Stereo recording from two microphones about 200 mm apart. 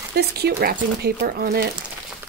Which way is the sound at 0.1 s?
55° right (ahead or behind).